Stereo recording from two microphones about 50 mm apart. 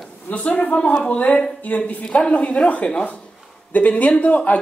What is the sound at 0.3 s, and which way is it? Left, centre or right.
A woman's voice, left.